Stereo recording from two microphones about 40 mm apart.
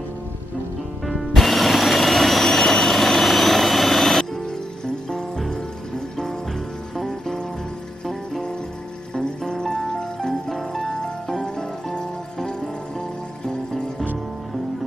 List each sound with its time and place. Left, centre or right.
1.0 s music: centre
7.0 s music: centre
9.1 s music: centre